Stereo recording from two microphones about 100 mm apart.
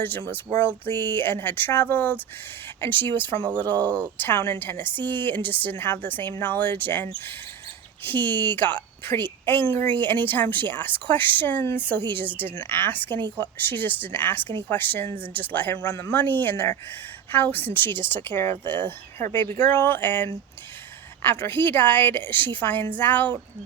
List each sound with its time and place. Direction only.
0.3 s a woman's voice: 20° left (ahead or behind)